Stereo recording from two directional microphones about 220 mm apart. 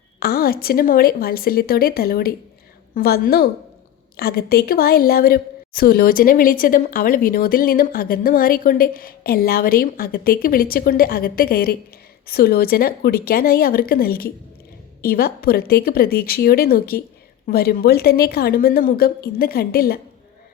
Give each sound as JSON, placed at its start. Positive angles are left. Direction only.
{"t": 0.2, "sound": "a woman's voice", "side_deg": 45}